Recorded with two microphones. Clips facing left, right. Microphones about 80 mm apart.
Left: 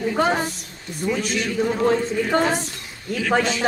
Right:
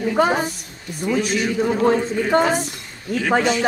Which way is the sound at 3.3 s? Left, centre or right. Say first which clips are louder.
Right 2 dB; centre.